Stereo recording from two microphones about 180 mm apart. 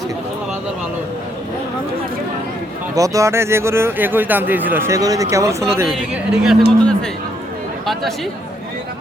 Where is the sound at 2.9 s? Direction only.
20° right (ahead or behind).